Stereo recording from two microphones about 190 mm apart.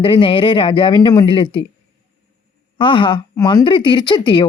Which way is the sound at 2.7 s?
25° left (ahead or behind).